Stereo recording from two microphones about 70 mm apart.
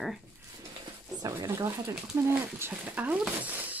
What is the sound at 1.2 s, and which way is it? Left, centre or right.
Speech, right.